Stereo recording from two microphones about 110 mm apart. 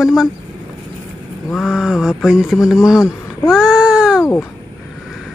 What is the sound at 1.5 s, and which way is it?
Speech, 5° right (ahead or behind).